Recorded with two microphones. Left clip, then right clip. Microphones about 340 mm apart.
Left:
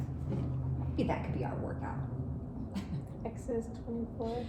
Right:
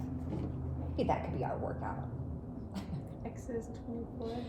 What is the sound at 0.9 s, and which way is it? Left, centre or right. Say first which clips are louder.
Speech: right 2 dB; centre.